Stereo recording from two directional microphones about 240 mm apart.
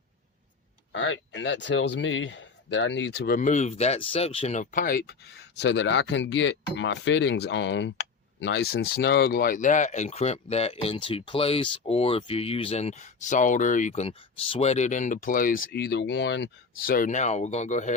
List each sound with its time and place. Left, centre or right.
0.9 s speech: left
5.5 s speech: left